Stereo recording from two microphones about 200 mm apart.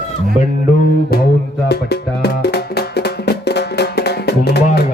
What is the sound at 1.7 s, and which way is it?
Music, 55° left (ahead or behind).